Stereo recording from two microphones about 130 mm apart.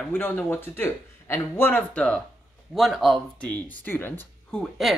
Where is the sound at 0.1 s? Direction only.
15° left (ahead or behind).